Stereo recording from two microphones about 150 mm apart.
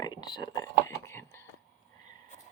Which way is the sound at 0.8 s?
15° left (ahead or behind).